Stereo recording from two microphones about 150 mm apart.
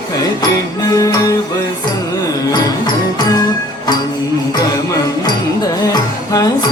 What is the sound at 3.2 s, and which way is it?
Music, 25° left (ahead or behind).